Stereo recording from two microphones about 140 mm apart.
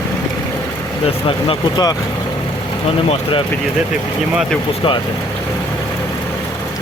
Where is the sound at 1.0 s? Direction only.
35° left (ahead or behind).